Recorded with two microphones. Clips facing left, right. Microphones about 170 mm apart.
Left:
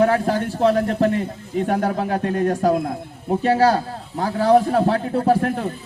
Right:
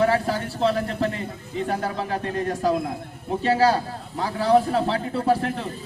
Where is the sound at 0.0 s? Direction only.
55° left (ahead or behind).